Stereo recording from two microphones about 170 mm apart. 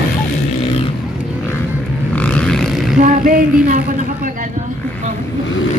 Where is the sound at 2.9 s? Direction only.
50° right (ahead or behind).